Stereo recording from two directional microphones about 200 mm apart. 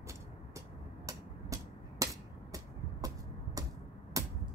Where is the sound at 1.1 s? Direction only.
15° right (ahead or behind).